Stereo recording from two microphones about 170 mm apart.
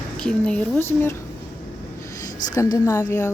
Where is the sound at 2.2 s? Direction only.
20° left (ahead or behind).